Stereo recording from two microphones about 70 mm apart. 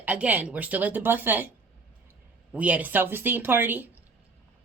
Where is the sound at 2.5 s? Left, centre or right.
Right.